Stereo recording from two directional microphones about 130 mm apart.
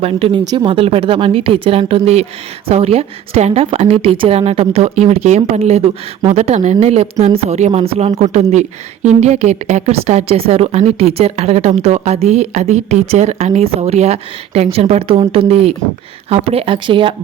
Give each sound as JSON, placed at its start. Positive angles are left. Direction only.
{"t": 0.0, "sound": "a woman's voice", "side_deg": -45}